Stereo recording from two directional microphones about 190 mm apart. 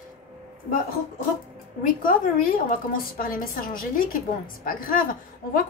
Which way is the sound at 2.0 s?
45° left (ahead or behind).